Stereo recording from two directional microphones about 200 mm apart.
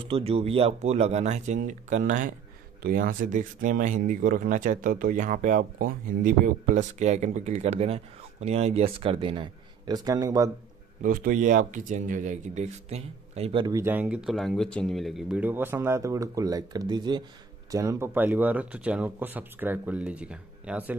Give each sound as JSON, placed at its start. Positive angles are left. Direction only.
{"t": 0.0, "sound": "speech", "side_deg": -30}
{"t": 11.0, "sound": "speech", "side_deg": -40}